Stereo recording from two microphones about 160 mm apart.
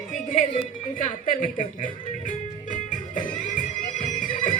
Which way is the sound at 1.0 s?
55° left (ahead or behind).